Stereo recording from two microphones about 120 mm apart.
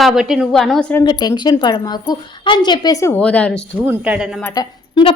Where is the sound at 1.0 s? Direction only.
35° left (ahead or behind).